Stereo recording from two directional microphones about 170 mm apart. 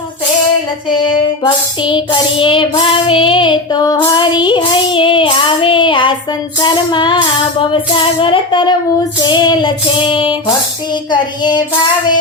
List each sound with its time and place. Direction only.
1.5 s child singing: 30° left (ahead or behind)
8.2 s child singing: 30° left (ahead or behind)